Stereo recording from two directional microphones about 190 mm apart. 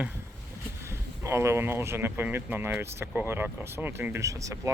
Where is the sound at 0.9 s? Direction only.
15° right (ahead or behind).